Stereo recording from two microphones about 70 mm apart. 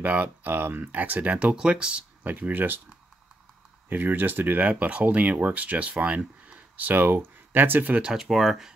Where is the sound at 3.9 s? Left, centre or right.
Right.